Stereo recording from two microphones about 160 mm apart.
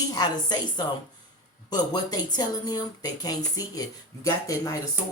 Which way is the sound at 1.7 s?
25° left (ahead or behind).